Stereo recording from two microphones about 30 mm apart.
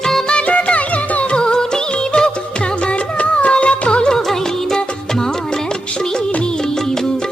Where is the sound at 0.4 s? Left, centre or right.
Left.